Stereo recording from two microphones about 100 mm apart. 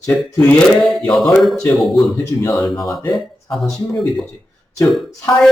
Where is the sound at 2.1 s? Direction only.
30° left (ahead or behind).